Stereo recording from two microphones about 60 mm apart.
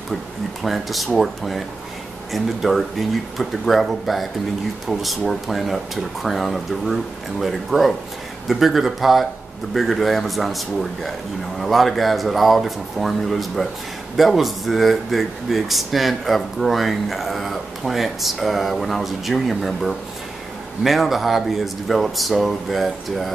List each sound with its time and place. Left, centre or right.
0.1 s speech: centre